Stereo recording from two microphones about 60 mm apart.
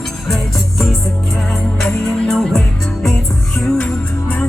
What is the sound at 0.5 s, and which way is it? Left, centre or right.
Music, centre.